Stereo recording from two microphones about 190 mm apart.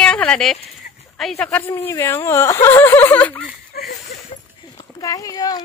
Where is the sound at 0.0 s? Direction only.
5° left (ahead or behind).